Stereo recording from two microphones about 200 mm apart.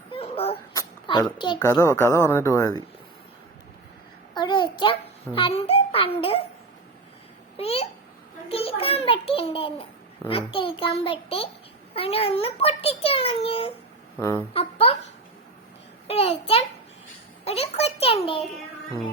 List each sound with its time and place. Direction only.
0.1 s a sound: 30° left (ahead or behind)
0.7 s a child's voice: 20° left (ahead or behind)
4.4 s a child's voice: 25° left (ahead or behind)
7.5 s a child's voice: 30° left (ahead or behind)
14.2 s speech: 15° left (ahead or behind)
14.5 s a child's voice: 30° left (ahead or behind)
16.0 s a child's voice: 30° left (ahead or behind)